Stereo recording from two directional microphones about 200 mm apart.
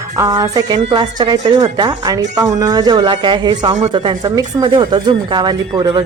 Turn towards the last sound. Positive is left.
turn(degrees=-20)  # may be behind; listen again after turning